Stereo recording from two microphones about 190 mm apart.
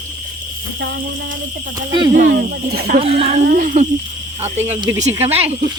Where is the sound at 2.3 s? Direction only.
55° right (ahead or behind).